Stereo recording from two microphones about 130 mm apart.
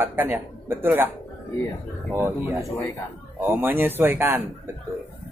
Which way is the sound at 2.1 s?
20° right (ahead or behind).